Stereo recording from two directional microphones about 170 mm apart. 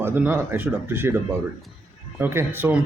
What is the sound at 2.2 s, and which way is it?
Speech, 15° right (ahead or behind).